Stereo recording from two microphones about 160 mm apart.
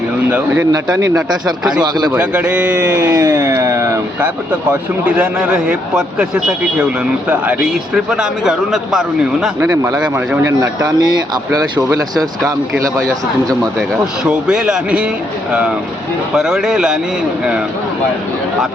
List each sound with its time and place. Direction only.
0.3 s speech: 10° right (ahead or behind)
0.7 s a man's voice: 20° right (ahead or behind)
2.1 s a man's voice: 10° right (ahead or behind)
9.6 s a man's voice: 20° right (ahead or behind)
13.0 s a man's voice: 5° left (ahead or behind)
14.3 s speech: 5° right (ahead or behind)
16.3 s a man's voice: 5° right (ahead or behind)